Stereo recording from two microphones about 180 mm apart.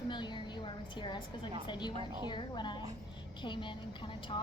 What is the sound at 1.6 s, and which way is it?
A woman's voice, 25° left (ahead or behind).